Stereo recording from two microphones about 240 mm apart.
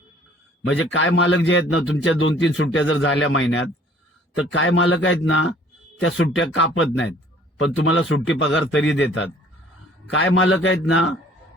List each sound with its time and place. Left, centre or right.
0.6 s a man's voice: left